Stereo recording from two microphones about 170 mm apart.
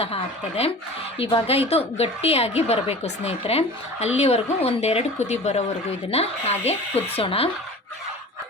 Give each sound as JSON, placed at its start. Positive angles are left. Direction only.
{"t": 0.0, "sound": "a woman's voice", "side_deg": 35}